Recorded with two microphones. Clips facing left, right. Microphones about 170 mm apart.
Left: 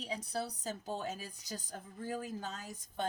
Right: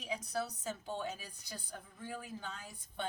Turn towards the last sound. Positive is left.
turn(degrees=40)  # may be behind; listen again after turning